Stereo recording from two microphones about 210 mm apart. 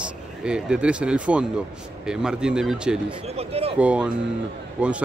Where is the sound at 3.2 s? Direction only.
30° right (ahead or behind).